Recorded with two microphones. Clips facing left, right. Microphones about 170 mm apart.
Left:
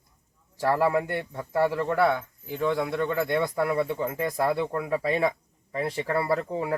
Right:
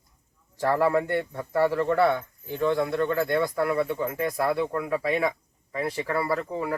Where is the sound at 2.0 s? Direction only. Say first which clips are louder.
Right 1 dB; centre (ahead or behind).